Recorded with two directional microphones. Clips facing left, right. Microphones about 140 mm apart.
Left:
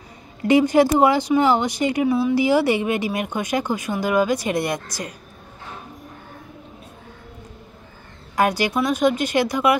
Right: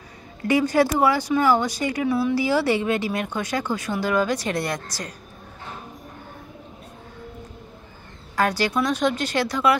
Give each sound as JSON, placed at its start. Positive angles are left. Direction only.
{"t": 0.5, "sound": "speech", "side_deg": 20}
{"t": 2.0, "sound": "speech", "side_deg": 5}
{"t": 2.3, "sound": "speech", "side_deg": 15}
{"t": 8.4, "sound": "speech", "side_deg": 15}